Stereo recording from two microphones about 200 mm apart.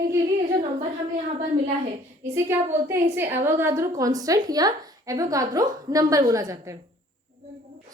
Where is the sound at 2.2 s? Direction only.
15° right (ahead or behind).